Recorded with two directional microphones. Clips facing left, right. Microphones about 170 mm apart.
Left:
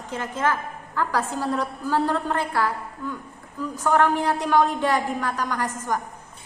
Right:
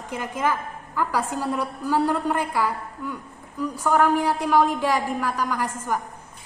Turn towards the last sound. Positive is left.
turn(degrees=-10)  # may be behind; listen again after turning